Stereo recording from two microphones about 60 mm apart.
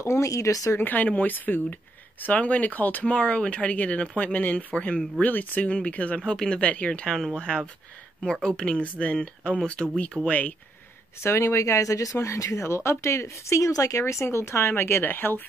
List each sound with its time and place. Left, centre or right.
0.0 s speech: left
0.7 s speech: left
6.2 s speech: centre
6.6 s speech: left
10.2 s speech: left
11.2 s speech: left